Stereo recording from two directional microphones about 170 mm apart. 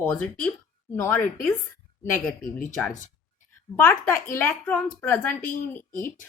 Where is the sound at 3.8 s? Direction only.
15° left (ahead or behind).